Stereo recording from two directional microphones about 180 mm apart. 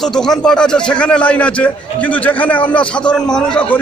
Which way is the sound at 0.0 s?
5° left (ahead or behind).